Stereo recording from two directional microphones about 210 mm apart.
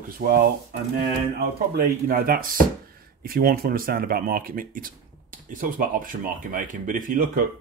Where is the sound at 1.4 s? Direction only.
50° right (ahead or behind).